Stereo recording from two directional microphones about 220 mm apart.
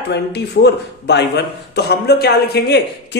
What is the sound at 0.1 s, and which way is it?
A man's voice, 50° left (ahead or behind).